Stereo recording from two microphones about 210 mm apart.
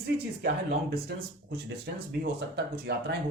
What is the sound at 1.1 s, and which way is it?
Speech, 50° right (ahead or behind).